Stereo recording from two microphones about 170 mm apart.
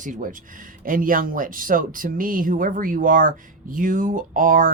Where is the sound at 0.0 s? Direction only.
50° right (ahead or behind).